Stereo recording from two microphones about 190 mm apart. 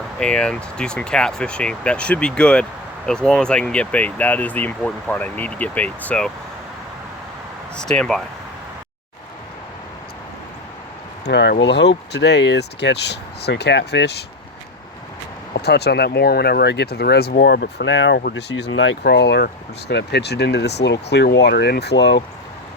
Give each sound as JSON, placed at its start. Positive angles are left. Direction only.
{"t": 0.2, "sound": "speech", "side_deg": 5}
{"t": 7.8, "sound": "speech", "side_deg": 5}
{"t": 11.3, "sound": "speech", "side_deg": 65}
{"t": 15.5, "sound": "speech", "side_deg": 60}